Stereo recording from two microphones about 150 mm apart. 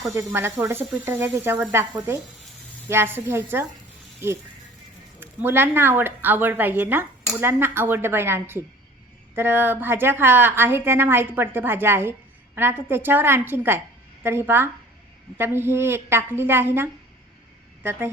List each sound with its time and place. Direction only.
0.0 s a woman's voice: 15° right (ahead or behind)